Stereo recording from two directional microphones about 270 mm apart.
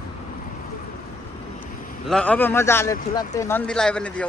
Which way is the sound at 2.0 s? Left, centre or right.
Centre.